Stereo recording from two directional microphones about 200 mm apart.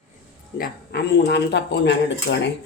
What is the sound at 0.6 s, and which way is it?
Speech, 55° left (ahead or behind).